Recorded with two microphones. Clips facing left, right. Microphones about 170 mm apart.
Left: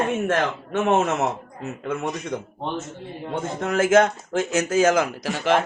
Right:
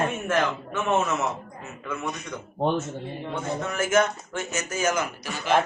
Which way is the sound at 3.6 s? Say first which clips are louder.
Left 6 dB; 90° left.